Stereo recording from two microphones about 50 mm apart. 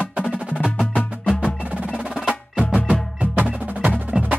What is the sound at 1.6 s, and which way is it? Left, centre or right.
Wood block, right.